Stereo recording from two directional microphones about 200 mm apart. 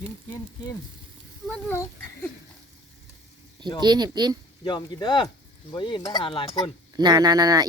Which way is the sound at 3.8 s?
20° right (ahead or behind).